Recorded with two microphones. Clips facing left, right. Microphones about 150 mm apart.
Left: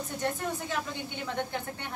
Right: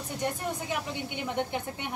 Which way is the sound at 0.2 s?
15° right (ahead or behind).